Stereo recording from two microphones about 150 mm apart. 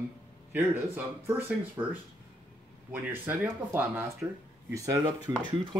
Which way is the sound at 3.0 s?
15° right (ahead or behind).